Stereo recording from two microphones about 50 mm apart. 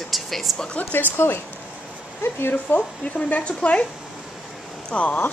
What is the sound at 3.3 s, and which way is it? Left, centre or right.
Speech, left.